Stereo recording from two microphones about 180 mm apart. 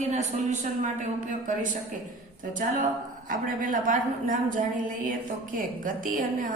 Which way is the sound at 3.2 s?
50° right (ahead or behind).